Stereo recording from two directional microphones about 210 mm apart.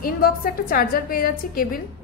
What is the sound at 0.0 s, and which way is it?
A woman's voice, 45° left (ahead or behind).